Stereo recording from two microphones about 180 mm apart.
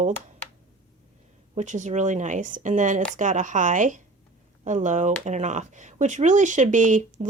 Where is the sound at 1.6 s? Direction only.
40° right (ahead or behind).